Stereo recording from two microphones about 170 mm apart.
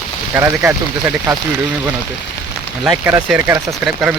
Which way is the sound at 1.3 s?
Centre (ahead or behind).